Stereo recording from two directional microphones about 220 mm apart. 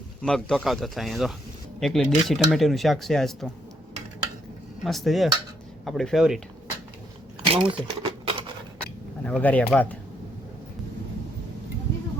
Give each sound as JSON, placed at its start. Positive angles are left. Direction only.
{"t": 0.2, "sound": "speech", "side_deg": 0}
{"t": 4.8, "sound": "speech", "side_deg": 0}
{"t": 7.5, "sound": "a sound", "side_deg": -25}
{"t": 9.2, "sound": "speech", "side_deg": 5}